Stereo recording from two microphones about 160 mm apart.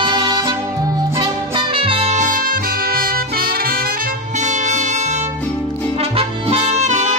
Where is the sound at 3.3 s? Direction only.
70° right (ahead or behind); by 5.3 s 45° right (ahead or behind).